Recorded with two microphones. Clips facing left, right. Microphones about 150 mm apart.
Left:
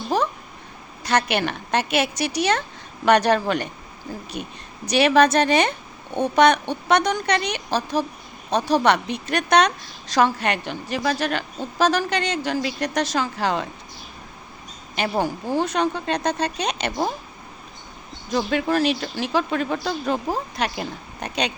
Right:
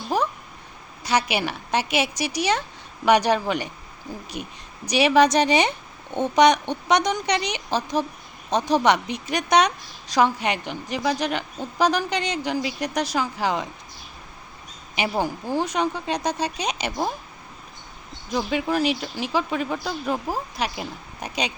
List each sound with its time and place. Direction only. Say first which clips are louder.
1.0 s a woman's voice: left 2 dB; 10° right (ahead or behind)
15.1 s speech: left 3 dB; 15° left (ahead or behind)
15.6 s a woman's voice: left 2 dB; 10° right (ahead or behind)
18.3 s a woman's voice: left 2 dB; 10° right (ahead or behind)